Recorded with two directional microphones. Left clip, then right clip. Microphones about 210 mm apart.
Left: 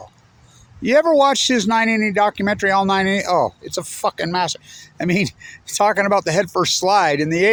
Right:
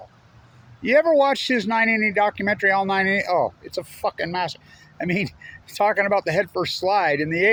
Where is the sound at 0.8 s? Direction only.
45° left (ahead or behind).